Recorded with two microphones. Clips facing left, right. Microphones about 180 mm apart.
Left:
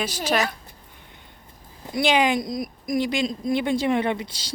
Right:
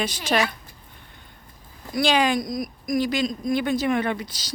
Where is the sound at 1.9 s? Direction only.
20° left (ahead or behind).